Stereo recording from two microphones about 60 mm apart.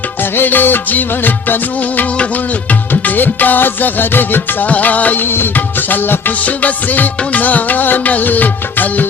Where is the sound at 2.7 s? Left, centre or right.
Left.